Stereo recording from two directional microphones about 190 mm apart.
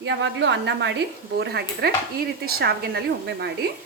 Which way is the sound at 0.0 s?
70° right (ahead or behind).